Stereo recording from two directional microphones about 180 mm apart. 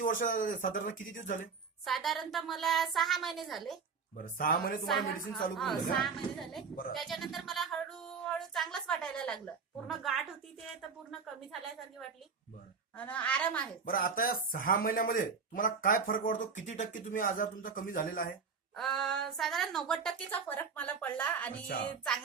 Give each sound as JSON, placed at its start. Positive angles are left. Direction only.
{"t": 0.0, "sound": "speech", "side_deg": 45}
{"t": 1.8, "sound": "a woman's voice", "side_deg": 0}
{"t": 4.2, "sound": "speech", "side_deg": 55}
{"t": 5.5, "sound": "a woman's voice", "side_deg": 0}
{"t": 13.0, "sound": "a woman's voice", "side_deg": 10}
{"t": 13.8, "sound": "speech", "side_deg": 50}
{"t": 18.8, "sound": "a woman's voice", "side_deg": 5}
{"t": 21.7, "sound": "speech", "side_deg": 55}